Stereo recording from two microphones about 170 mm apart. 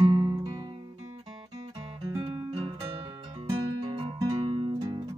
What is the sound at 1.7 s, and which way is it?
Guitar, 25° right (ahead or behind).